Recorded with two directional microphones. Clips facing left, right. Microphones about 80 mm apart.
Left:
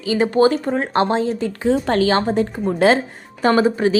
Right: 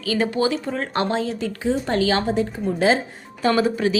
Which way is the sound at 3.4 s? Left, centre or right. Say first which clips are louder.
Left 4 dB; left.